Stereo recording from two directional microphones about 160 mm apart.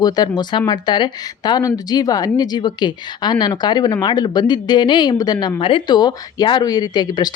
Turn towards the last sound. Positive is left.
turn(degrees=25)  # may be behind; listen again after turning